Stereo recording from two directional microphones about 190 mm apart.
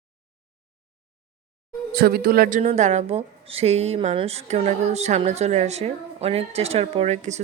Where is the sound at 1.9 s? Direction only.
55° right (ahead or behind).